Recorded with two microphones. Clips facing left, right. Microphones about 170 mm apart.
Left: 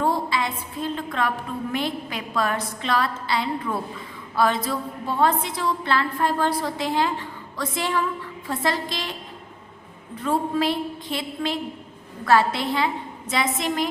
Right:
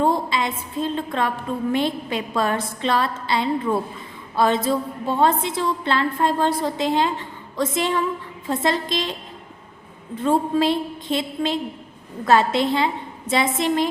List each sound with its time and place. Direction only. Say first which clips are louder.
0.0 s a sound: right 3 dB; 20° right (ahead or behind)
1.7 s a woman's voice: right 5 dB; 25° right (ahead or behind)
10.2 s a woman's voice: right 4 dB; 25° right (ahead or behind)